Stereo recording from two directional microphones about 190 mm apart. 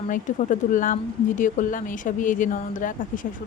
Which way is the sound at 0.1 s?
45° left (ahead or behind).